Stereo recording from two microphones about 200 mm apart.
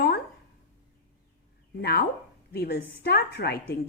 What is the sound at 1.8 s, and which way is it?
A woman's voice, 50° left (ahead or behind).